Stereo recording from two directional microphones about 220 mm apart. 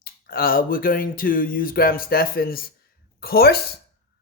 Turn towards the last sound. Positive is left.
turn(degrees=45)  # may be behind; listen again after turning